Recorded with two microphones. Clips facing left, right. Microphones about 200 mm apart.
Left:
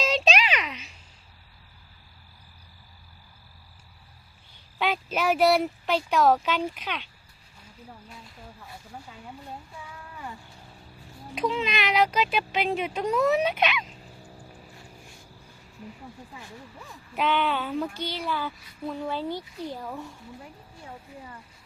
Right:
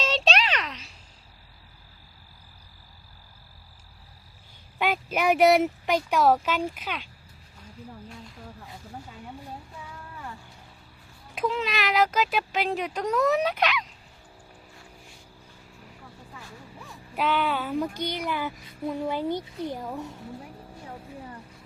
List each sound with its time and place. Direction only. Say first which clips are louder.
0.0 s a sound: left 1 dB; 5° left (ahead or behind)
4.8 s speech: right 1 dB; 10° right (ahead or behind)
11.3 s speech: even; centre (ahead or behind)
16.8 s speech: even; 5° right (ahead or behind); by 20.1 s 20° right (ahead or behind)